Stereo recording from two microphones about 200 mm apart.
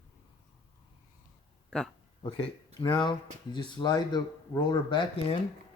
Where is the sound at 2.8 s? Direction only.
25° left (ahead or behind).